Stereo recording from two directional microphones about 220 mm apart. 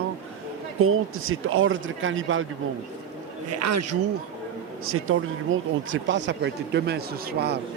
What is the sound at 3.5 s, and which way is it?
Speech, 90° right.